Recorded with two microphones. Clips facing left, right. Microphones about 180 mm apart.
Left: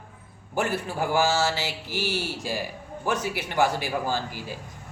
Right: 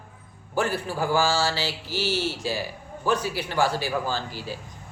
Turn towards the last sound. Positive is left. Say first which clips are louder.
# even
turn(degrees=15)  # may be behind; listen again after turning